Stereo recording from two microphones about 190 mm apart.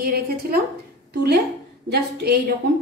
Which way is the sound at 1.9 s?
55° right (ahead or behind).